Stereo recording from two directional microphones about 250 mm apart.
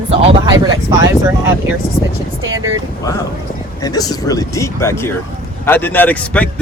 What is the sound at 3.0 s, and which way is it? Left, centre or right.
Speech, centre.